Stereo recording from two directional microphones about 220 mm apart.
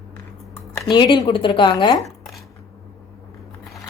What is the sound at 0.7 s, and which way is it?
A woman's voice, 15° left (ahead or behind).